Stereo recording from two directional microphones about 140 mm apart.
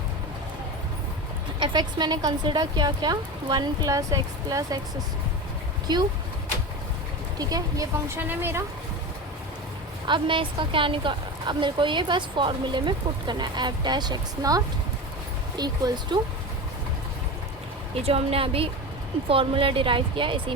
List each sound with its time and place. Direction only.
1.5 s speech: 35° right (ahead or behind)
5.9 s speech: 30° right (ahead or behind)
7.3 s a woman's voice: 25° right (ahead or behind)
10.1 s a woman's voice: 35° right (ahead or behind)
17.9 s a woman's voice: 45° right (ahead or behind)